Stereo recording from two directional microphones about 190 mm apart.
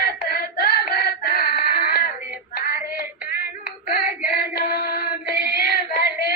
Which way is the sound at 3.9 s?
55° left (ahead or behind).